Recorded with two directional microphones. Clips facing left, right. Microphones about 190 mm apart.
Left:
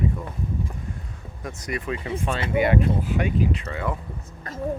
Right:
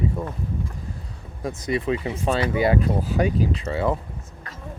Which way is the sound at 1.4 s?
30° right (ahead or behind).